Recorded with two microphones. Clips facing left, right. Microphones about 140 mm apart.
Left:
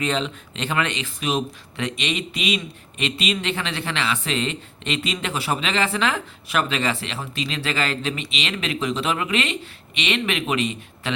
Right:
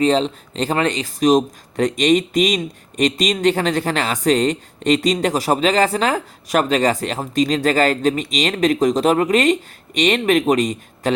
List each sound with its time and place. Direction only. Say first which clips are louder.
0.0 s speech: right 8 dB; 35° right (ahead or behind)